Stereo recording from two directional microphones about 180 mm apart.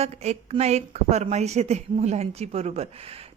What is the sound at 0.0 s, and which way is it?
A woman's voice, 35° right (ahead or behind).